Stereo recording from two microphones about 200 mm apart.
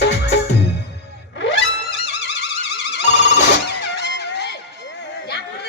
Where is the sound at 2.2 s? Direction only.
55° left (ahead or behind).